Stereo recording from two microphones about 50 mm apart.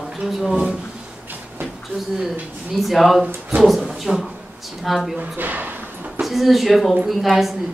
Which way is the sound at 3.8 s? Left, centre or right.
Centre.